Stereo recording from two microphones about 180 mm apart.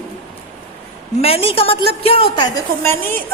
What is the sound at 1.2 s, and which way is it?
A woman's voice, 35° left (ahead or behind).